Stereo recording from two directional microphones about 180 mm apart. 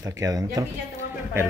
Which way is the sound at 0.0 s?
15° right (ahead or behind).